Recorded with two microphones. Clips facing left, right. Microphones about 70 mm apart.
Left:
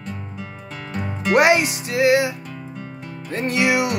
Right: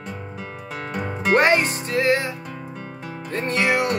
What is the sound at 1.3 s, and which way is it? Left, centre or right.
Music, centre.